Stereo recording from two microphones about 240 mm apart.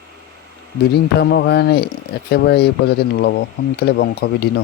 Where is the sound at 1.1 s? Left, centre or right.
Left.